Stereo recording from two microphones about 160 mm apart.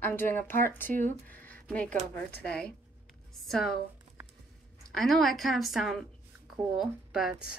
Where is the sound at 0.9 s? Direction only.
55° right (ahead or behind).